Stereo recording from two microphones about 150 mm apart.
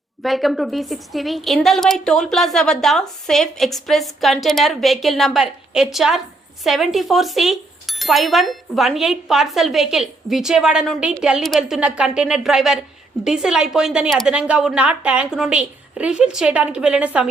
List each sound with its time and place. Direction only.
0.2 s a woman's voice: centre (ahead or behind)